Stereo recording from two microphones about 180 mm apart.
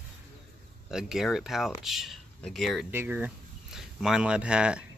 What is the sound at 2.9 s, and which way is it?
Speech, 10° right (ahead or behind).